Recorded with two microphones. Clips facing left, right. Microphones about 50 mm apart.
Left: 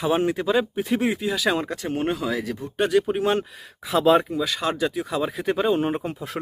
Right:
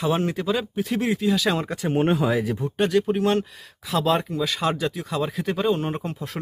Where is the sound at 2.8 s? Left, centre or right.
Centre.